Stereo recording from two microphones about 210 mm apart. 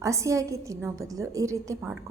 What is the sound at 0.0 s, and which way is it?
A woman's voice, 15° right (ahead or behind).